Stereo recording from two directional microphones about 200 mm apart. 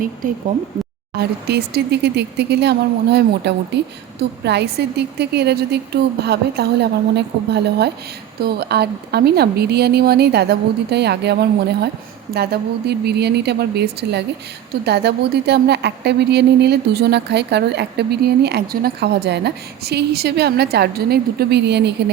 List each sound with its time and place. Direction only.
0.2 s speech: 45° right (ahead or behind)
1.1 s a woman's voice: 55° right (ahead or behind)